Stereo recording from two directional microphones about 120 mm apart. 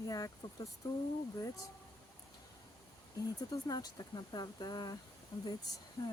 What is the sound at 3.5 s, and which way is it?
Speech, 30° left (ahead or behind).